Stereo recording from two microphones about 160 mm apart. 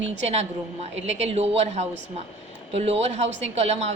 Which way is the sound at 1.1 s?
40° right (ahead or behind).